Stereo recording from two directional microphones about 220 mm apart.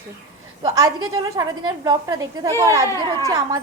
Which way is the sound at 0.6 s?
15° right (ahead or behind).